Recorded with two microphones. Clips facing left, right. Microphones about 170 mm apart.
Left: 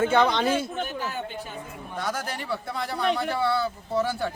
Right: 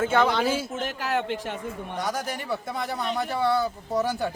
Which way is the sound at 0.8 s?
90° right.